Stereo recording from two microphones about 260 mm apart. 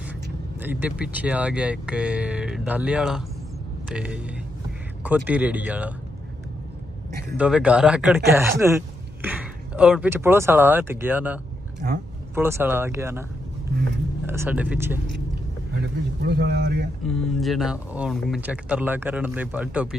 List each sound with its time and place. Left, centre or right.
0.6 s speech: centre
7.3 s speech: centre
14.2 s speech: centre
15.8 s a man's voice: right
17.1 s speech: centre